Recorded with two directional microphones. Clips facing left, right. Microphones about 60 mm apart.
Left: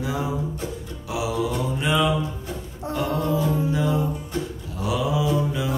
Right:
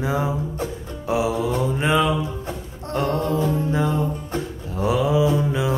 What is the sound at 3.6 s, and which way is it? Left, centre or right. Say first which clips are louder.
Music: right 1 dB; right.